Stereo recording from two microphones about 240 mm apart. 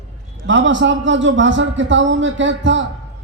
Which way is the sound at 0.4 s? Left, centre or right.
Right.